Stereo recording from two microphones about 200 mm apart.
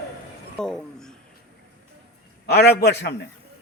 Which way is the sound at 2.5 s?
55° left (ahead or behind).